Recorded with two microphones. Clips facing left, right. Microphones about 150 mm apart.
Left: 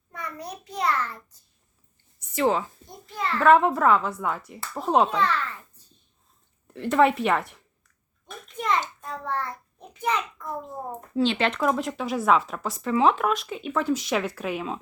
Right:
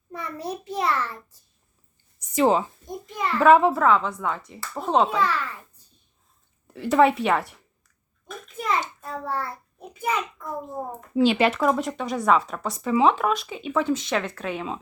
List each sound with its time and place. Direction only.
0.1 s a child's voice: 30° right (ahead or behind)
2.3 s a child's voice: 20° right (ahead or behind); by 5.0 s 5° left (ahead or behind)
5.0 s a child's voice: 10° right (ahead or behind)
6.7 s speech: centre (ahead or behind)
8.5 s a child's voice: 5° right (ahead or behind)